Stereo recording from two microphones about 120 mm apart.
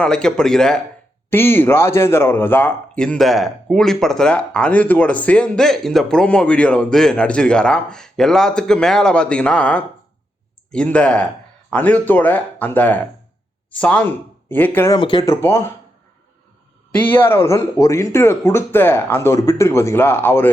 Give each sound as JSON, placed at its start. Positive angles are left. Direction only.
{"t": 0.0, "sound": "speech", "side_deg": 5}
{"t": 1.3, "sound": "a man's voice", "side_deg": 20}
{"t": 14.8, "sound": "speech", "side_deg": 40}
{"t": 15.4, "sound": "speech", "side_deg": 25}
{"t": 17.0, "sound": "speech", "side_deg": 15}